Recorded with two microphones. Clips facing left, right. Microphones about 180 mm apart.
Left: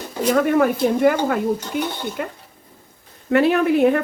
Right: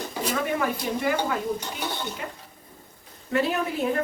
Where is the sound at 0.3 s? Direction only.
55° left (ahead or behind).